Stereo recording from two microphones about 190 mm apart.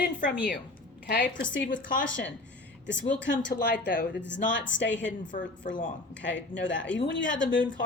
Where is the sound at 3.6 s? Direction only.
65° left (ahead or behind).